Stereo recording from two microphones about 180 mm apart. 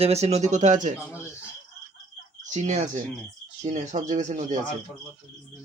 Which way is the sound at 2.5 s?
40° right (ahead or behind).